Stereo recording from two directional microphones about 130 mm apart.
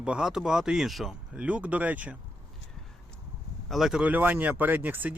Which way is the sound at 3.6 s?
Centre (ahead or behind).